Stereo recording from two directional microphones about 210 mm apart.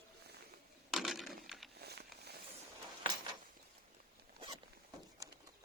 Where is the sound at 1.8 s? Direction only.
50° right (ahead or behind).